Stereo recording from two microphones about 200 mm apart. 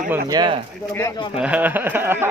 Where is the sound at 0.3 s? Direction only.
25° right (ahead or behind).